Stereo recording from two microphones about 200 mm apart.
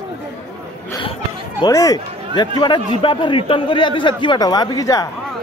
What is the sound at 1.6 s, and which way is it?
A man's voice, 15° left (ahead or behind).